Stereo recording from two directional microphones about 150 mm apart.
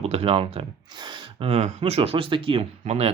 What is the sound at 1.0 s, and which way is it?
Gasp, 30° right (ahead or behind).